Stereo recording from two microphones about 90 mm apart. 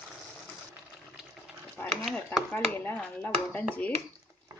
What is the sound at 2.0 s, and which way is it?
Speech, 10° left (ahead or behind).